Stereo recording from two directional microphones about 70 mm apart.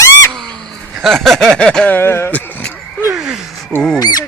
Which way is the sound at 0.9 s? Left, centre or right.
Centre.